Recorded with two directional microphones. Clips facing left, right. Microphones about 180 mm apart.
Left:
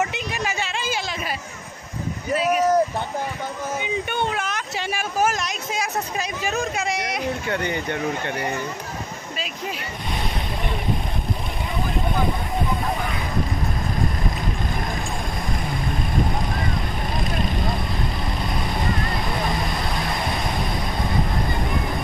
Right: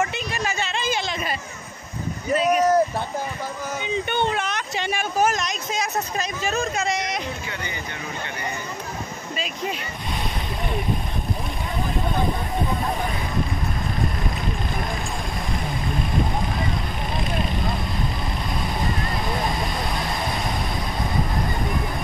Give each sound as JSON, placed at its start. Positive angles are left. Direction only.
{"t": 0.1, "sound": "a sound", "side_deg": 15}
{"t": 2.3, "sound": "speech", "side_deg": 5}
{"t": 3.8, "sound": "speech", "side_deg": 5}
{"t": 7.4, "sound": "speech", "side_deg": 55}